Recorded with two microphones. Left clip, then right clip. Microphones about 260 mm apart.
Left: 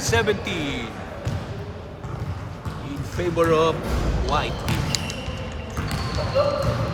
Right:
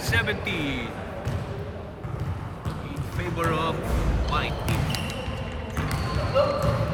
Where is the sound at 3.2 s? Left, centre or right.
Centre.